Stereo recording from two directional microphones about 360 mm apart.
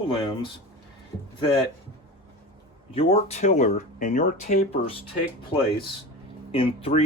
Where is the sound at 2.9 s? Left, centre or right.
Centre.